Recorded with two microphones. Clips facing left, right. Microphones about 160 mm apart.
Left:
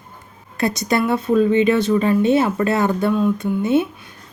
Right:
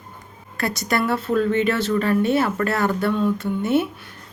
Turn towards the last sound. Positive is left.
turn(degrees=15)  # may be behind; listen again after turning